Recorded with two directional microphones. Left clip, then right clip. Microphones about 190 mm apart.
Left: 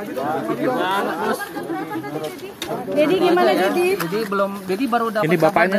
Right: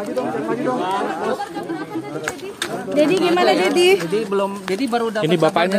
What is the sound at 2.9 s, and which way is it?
Speech, 60° right (ahead or behind).